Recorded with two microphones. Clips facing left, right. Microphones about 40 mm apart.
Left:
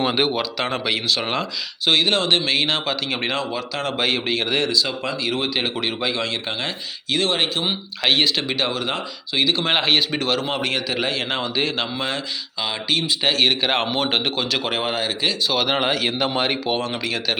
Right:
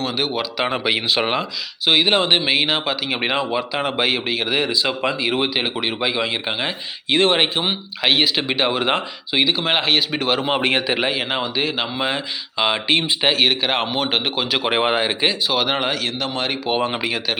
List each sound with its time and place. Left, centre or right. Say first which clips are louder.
0.0 s speech: left 3 dB; centre
0.6 s speech: right 5 dB; centre
4.7 s speech: right 2 dB; right
7.1 s speech: right 4 dB; right
11.3 s speech: right 1 dB; centre
12.5 s speech: right 5 dB; right
13.2 s speech: even; centre
15.4 s speech: right 1 dB; centre
16.0 s speech: left 2 dB; centre
16.6 s speech: right 3 dB; centre